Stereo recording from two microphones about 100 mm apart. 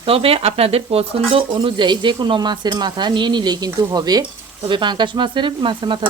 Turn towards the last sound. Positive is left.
turn(degrees=-55)  # may be behind; listen again after turning